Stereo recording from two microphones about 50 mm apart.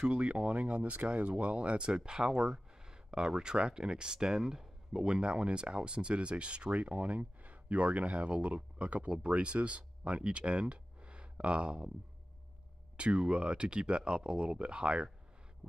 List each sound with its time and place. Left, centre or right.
0.1 s speech: right
12.9 s speech: right